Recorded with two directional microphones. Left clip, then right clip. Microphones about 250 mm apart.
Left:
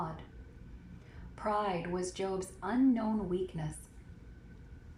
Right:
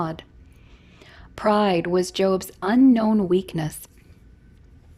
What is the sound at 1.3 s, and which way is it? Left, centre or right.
A woman's voice, right.